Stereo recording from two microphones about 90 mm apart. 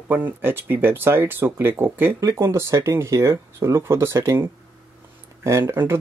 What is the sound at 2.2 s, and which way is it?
Speech, 35° right (ahead or behind).